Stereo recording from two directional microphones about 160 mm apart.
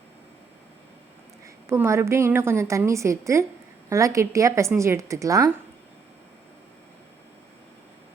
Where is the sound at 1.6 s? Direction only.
15° right (ahead or behind).